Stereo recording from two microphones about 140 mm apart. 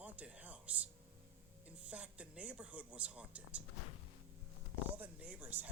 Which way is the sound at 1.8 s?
10° right (ahead or behind).